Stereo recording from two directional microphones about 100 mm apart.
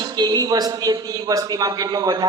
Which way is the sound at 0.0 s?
45° right (ahead or behind).